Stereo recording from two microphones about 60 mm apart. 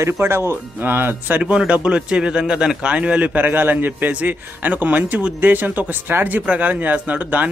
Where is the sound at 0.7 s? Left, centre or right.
Right.